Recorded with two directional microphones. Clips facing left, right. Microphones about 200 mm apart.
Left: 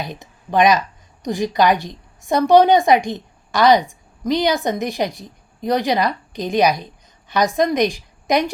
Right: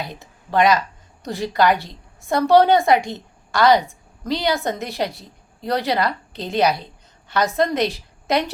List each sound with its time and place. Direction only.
0.0 s a woman's voice: 20° left (ahead or behind)